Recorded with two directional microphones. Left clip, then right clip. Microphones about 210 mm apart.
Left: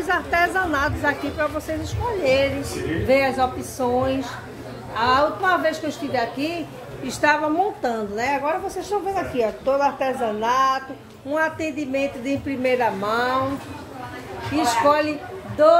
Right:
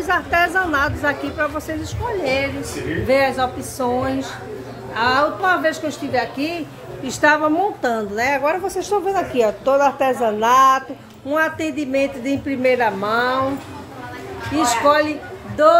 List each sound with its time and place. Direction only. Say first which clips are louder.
0.0 s a woman's voice: right 3 dB; 10° right (ahead or behind)
14.5 s a man's voice: right 3 dB; 15° right (ahead or behind)